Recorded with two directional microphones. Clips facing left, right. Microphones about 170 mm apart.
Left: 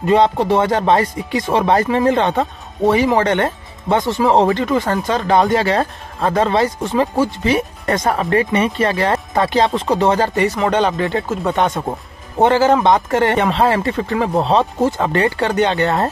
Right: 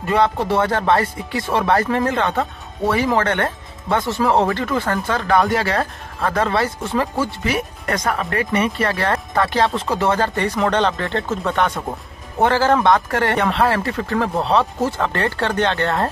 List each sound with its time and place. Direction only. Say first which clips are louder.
0.0 s speech: left 4 dB; 20° left (ahead or behind)
11.5 s speech: left 3 dB; 20° left (ahead or behind)